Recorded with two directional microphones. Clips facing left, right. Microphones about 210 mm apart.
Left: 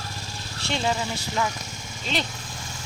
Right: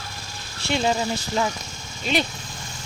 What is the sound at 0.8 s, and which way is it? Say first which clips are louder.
Speech: right 3 dB; 25° right (ahead or behind).